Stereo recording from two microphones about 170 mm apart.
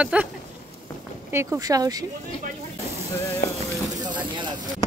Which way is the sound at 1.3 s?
15° right (ahead or behind).